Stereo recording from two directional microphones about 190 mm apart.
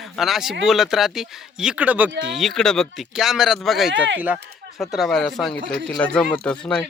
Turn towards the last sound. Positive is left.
turn(degrees=5)  # may be behind; listen again after turning